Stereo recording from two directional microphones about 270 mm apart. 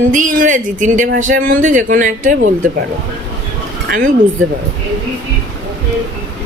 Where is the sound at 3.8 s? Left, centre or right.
Right.